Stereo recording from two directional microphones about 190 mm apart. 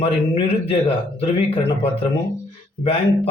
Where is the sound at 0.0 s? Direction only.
30° left (ahead or behind).